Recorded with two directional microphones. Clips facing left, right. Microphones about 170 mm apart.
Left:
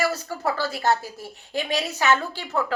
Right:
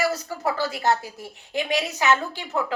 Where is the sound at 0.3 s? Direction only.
15° right (ahead or behind).